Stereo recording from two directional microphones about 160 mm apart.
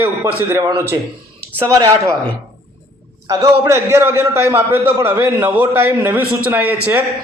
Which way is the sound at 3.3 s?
20° right (ahead or behind).